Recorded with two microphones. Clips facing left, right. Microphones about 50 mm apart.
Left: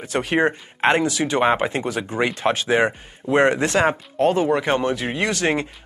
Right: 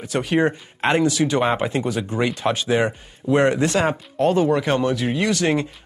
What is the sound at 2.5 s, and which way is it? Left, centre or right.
Speech, left.